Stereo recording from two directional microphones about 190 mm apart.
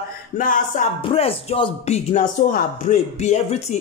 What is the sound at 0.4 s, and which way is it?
Music, 45° left (ahead or behind).